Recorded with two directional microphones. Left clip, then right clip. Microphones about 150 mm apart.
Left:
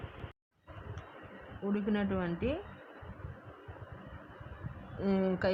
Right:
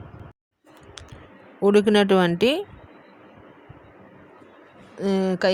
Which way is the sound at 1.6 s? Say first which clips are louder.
Right 18 dB; 90° right.